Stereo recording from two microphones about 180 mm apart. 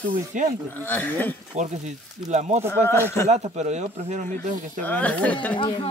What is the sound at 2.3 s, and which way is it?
Speech, 40° right (ahead or behind).